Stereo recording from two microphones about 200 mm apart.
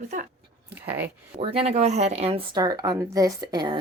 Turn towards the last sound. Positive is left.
turn(degrees=-25)  # may be behind; listen again after turning